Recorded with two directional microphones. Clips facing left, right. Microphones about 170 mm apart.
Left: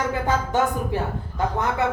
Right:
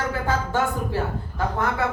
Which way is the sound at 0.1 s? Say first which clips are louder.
Left 2 dB; 20° left (ahead or behind).